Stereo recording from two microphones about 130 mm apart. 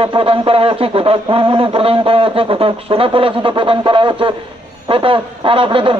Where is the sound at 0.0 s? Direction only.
45° right (ahead or behind).